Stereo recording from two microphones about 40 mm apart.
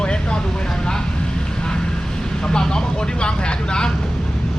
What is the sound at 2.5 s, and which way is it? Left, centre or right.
Speech, centre.